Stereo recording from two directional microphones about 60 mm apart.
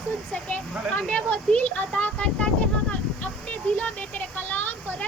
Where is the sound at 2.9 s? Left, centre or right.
Left.